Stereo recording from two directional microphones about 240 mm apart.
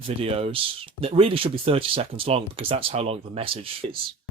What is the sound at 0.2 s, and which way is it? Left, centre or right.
Speech, right.